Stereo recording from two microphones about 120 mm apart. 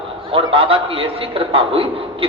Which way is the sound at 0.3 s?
50° right (ahead or behind).